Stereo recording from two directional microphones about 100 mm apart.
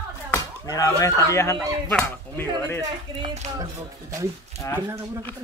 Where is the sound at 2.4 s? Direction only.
25° left (ahead or behind).